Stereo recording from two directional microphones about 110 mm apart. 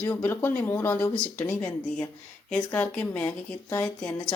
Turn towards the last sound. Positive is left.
turn(degrees=10)  # may be behind; listen again after turning